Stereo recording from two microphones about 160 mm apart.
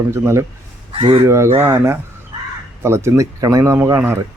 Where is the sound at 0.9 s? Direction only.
35° right (ahead or behind).